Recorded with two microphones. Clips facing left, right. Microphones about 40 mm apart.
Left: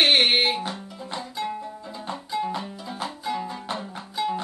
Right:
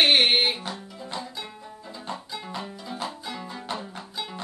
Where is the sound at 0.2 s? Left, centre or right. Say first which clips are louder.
Left 1 dB; centre.